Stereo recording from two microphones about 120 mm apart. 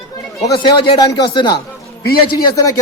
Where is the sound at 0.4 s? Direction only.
35° left (ahead or behind).